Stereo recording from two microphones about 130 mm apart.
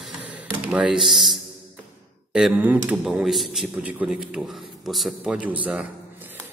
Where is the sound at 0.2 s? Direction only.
10° right (ahead or behind).